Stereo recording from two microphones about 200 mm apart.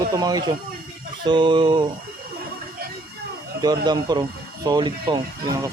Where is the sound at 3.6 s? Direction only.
20° right (ahead or behind).